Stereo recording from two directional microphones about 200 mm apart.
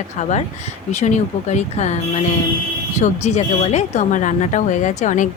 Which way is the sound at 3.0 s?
35° left (ahead or behind).